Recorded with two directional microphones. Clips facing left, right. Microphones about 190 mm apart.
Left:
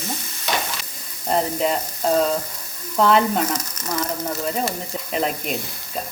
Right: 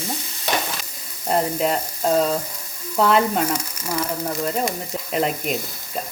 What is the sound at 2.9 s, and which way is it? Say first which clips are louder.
Frying: left 1 dB; 5° right (ahead or behind).